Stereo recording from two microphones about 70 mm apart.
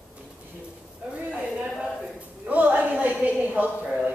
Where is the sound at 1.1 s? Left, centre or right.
Centre.